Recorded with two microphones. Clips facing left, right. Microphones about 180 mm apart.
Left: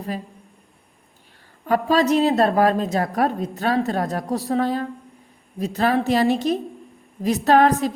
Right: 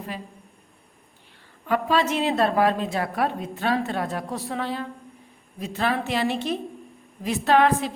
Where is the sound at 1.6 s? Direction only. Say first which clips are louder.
Left 4 dB; 40° left (ahead or behind).